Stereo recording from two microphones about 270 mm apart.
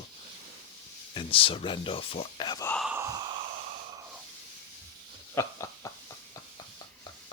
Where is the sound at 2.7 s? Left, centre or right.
Centre.